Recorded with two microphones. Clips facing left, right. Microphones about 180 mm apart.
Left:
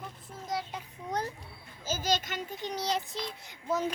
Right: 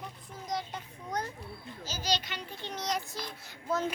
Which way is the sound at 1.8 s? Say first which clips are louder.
Left 3 dB; 50° left (ahead or behind).